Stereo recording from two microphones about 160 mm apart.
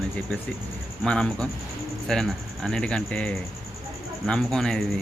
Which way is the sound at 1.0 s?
5° left (ahead or behind).